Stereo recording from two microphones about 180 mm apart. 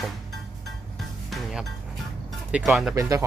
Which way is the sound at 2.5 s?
5° right (ahead or behind).